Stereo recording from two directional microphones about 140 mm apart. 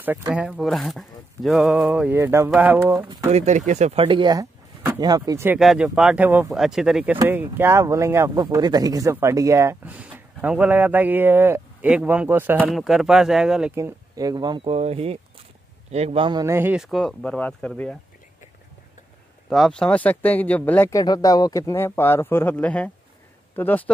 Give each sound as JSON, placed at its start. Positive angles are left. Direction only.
{"t": 0.3, "sound": "speech", "side_deg": -5}
{"t": 2.1, "sound": "speech", "side_deg": -20}
{"t": 3.3, "sound": "speech", "side_deg": -55}
{"t": 4.0, "sound": "speech", "side_deg": -35}
{"t": 5.6, "sound": "speech", "side_deg": 0}
{"t": 7.2, "sound": "speech", "side_deg": -15}
{"t": 12.7, "sound": "speech", "side_deg": 0}
{"t": 13.7, "sound": "speech", "side_deg": -25}
{"t": 14.7, "sound": "speech", "side_deg": -45}
{"t": 16.3, "sound": "speech", "side_deg": -30}
{"t": 16.5, "sound": "speech", "side_deg": -15}
{"t": 16.8, "sound": "speech", "side_deg": 0}
{"t": 19.5, "sound": "speech", "side_deg": 5}
{"t": 20.9, "sound": "speech", "side_deg": 25}